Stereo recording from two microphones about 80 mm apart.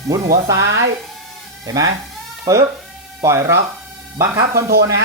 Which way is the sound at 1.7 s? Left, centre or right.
Right.